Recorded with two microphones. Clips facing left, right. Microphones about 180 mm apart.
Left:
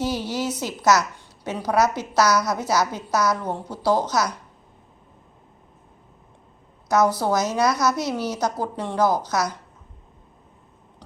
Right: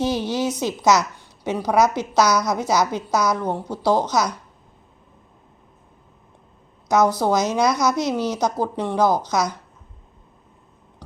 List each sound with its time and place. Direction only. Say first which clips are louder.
0.0 s a sound: right 3 dB; 15° right (ahead or behind)
0.6 s a woman's voice: right 1 dB; 15° right (ahead or behind)
2.2 s speech: left 1 dB; 5° left (ahead or behind)
2.5 s a woman's voice: right 2 dB; 15° right (ahead or behind)
6.8 s a woman's voice: right 2 dB; 5° left (ahead or behind)
8.4 s a woman's voice: right 3 dB; 15° right (ahead or behind)
9.0 s speech: right 1 dB; 10° left (ahead or behind)